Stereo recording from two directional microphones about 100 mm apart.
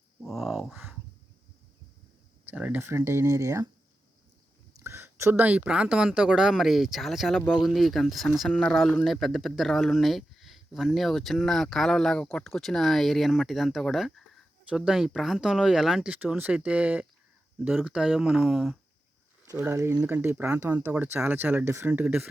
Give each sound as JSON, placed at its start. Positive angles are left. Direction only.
{"t": 0.2, "sound": "speech", "side_deg": 0}
{"t": 2.5, "sound": "speech", "side_deg": -15}
{"t": 2.8, "sound": "speech", "side_deg": -25}
{"t": 4.8, "sound": "a sound", "side_deg": -25}
{"t": 5.4, "sound": "speech", "side_deg": -15}
{"t": 16.0, "sound": "speech", "side_deg": -15}
{"t": 19.5, "sound": "speech", "side_deg": -25}